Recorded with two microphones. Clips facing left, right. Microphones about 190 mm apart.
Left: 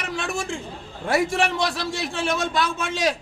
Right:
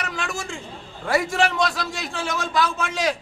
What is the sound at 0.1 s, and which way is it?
Chatter, 30° left (ahead or behind).